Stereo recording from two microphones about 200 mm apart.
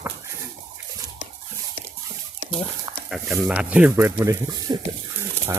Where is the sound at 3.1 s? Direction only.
Centre (ahead or behind).